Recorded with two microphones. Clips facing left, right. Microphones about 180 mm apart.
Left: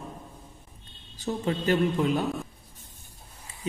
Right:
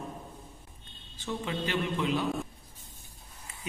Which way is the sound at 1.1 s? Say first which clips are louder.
Left 5 dB; 40° left (ahead or behind).